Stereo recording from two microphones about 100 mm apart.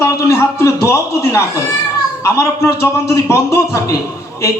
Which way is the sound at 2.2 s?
30° left (ahead or behind).